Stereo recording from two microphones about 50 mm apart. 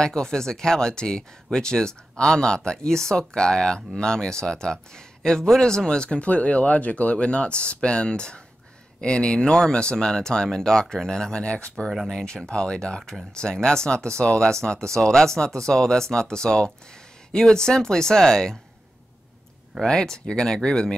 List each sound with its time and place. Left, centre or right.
0.0 s speech: centre
19.8 s speech: centre